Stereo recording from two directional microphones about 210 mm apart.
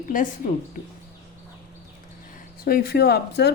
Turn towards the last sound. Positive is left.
turn(degrees=50)  # may be behind; listen again after turning